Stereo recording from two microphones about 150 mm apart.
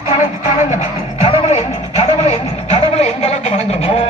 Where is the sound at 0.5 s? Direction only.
50° left (ahead or behind).